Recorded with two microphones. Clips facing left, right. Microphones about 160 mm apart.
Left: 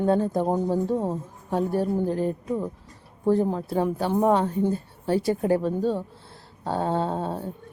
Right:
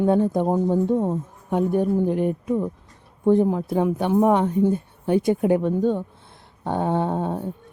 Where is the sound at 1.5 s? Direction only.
15° right (ahead or behind).